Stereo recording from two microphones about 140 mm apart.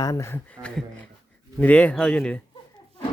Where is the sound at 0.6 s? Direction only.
25° right (ahead or behind).